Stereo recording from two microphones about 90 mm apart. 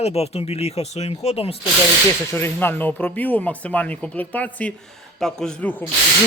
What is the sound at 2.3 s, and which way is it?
A man's voice, 25° left (ahead or behind).